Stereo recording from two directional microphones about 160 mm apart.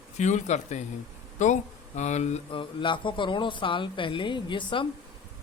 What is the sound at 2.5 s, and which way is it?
A man's voice, 30° left (ahead or behind).